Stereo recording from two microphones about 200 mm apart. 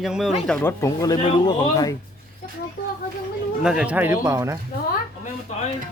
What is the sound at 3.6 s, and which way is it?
Speech, 5° right (ahead or behind).